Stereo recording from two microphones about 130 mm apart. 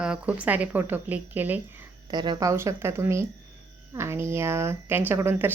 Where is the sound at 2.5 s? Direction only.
20° right (ahead or behind).